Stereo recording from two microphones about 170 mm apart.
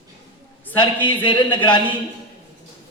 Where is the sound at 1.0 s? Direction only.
30° left (ahead or behind).